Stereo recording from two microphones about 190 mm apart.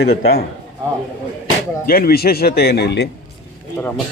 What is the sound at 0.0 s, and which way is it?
Speech, 55° left (ahead or behind).